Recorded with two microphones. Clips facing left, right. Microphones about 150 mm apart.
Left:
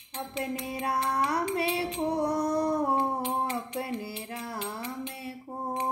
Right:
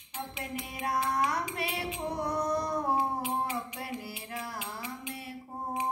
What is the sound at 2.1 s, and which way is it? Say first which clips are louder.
Music: left 3 dB; 35° left (ahead or behind).